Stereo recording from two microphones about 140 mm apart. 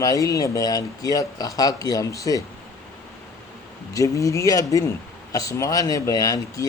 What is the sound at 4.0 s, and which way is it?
Speech, 25° left (ahead or behind).